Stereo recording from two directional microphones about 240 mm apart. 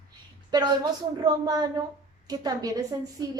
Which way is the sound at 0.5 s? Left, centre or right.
Centre.